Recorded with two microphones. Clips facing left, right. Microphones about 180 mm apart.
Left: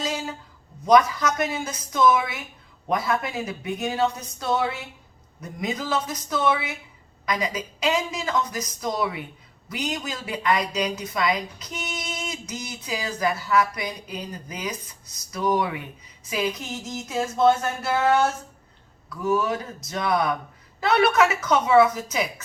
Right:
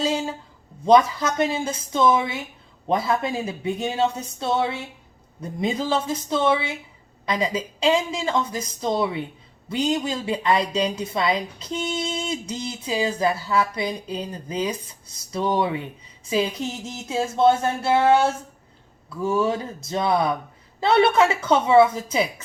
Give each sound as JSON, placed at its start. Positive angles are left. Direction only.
{"t": 0.0, "sound": "a man's voice", "side_deg": -30}